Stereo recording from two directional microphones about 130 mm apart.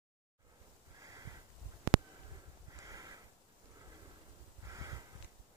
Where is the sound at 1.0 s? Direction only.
25° right (ahead or behind).